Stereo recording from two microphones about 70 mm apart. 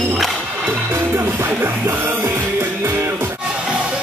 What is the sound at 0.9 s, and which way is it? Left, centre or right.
Music, right.